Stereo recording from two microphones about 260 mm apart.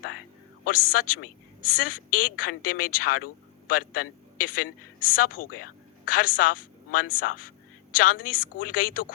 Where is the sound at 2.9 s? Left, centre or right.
Left.